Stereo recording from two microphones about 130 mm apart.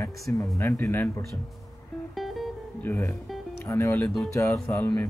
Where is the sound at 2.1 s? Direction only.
Centre (ahead or behind).